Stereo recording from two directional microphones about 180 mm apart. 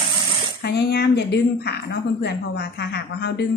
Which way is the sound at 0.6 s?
65° left (ahead or behind).